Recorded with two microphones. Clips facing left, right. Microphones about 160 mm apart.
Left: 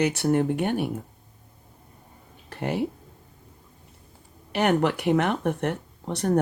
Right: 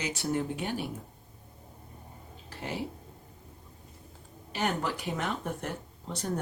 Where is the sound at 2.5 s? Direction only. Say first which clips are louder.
Left 9 dB; 60° left (ahead or behind).